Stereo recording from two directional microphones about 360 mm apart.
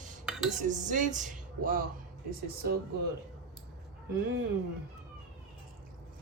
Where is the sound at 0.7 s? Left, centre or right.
Right.